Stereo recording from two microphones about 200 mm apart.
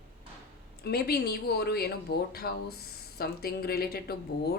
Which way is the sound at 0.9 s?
50° left (ahead or behind).